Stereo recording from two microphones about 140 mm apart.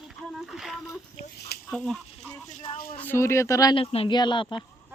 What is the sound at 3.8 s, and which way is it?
Speech, 35° left (ahead or behind).